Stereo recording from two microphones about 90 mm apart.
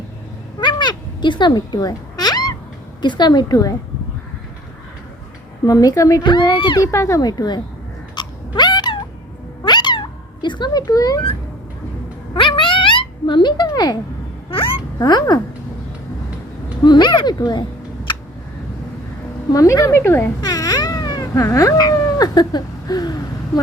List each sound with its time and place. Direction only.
0.6 s a sound: 55° left (ahead or behind)
3.0 s speech: 55° left (ahead or behind)
5.6 s speech: 45° left (ahead or behind)
6.2 s speech: 60° left (ahead or behind)
6.8 s speech: 35° left (ahead or behind)
8.1 s a sound: 55° left (ahead or behind)
9.6 s cat: 55° left (ahead or behind)
10.4 s speech: 55° left (ahead or behind)
12.3 s a sound: 65° left (ahead or behind)
14.9 s speech: 50° left (ahead or behind)
16.8 s speech: 55° left (ahead or behind)
19.5 s speech: 40° left (ahead or behind)
20.4 s a sound: 45° left (ahead or behind)